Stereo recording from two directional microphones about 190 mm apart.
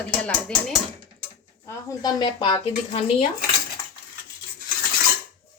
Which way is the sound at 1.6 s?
20° left (ahead or behind).